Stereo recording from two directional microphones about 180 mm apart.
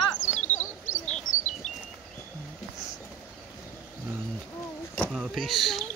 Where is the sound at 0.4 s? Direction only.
10° left (ahead or behind).